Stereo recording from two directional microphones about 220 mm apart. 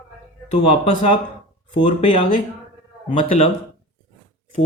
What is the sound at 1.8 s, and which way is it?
A man's voice, 35° left (ahead or behind).